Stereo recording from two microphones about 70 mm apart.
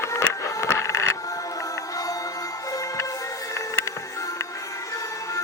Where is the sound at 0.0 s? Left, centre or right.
Left.